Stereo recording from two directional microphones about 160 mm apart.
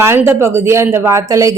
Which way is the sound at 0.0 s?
15° right (ahead or behind).